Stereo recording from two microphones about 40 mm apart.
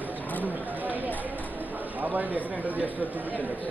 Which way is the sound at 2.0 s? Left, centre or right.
Right.